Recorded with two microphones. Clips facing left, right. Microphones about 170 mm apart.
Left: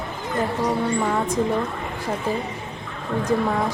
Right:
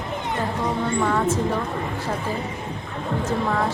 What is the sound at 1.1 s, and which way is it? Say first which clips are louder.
Speech: right 2 dB; 15° left (ahead or behind).